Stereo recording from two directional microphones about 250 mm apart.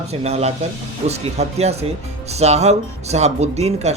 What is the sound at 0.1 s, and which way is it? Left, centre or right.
Speech, right.